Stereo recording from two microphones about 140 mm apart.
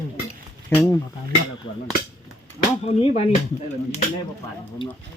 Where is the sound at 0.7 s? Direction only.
20° left (ahead or behind).